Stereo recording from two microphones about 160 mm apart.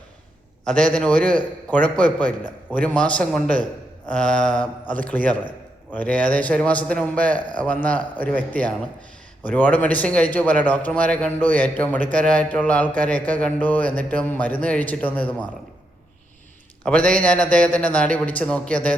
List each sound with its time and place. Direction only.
0.6 s a man's voice: 5° left (ahead or behind)
16.8 s a man's voice: 5° left (ahead or behind)